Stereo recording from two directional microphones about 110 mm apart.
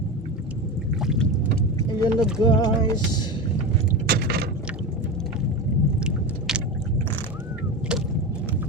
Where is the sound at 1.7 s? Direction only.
35° left (ahead or behind).